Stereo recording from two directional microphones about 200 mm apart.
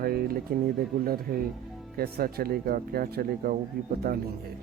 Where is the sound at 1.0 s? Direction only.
45° right (ahead or behind).